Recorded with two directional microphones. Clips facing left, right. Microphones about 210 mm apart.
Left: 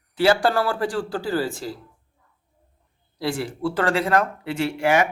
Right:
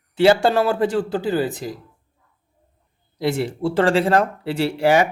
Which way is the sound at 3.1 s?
20° right (ahead or behind).